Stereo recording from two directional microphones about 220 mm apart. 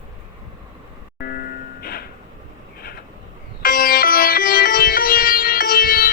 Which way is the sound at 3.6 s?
45° left (ahead or behind).